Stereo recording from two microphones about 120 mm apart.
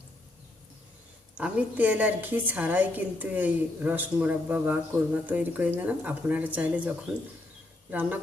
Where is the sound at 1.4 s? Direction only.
10° right (ahead or behind).